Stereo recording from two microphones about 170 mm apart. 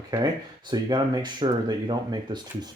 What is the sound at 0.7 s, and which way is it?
Speech, 25° right (ahead or behind).